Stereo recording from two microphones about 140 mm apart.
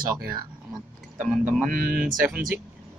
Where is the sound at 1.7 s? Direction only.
90° right.